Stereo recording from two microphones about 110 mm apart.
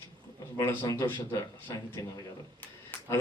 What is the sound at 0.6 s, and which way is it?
A man's voice, 20° left (ahead or behind).